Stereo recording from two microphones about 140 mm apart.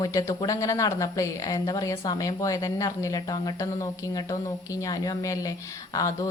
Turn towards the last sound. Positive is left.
turn(degrees=25)  # may be behind; listen again after turning